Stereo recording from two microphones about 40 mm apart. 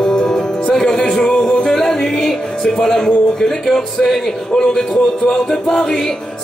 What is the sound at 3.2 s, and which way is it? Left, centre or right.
Music, left.